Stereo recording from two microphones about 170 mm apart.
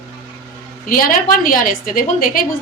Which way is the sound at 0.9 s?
55° left (ahead or behind).